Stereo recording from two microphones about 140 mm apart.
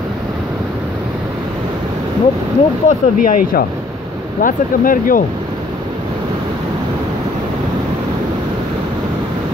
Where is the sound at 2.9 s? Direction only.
75° left (ahead or behind).